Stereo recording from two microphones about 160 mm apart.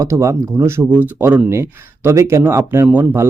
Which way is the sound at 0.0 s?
20° right (ahead or behind).